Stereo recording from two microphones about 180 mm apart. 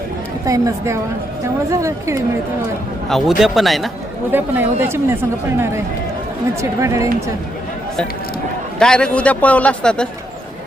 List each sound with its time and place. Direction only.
0.4 s a woman's voice: 20° right (ahead or behind)
3.1 s speech: centre (ahead or behind)
4.3 s speech: 10° right (ahead or behind)
8.8 s speech: 5° left (ahead or behind)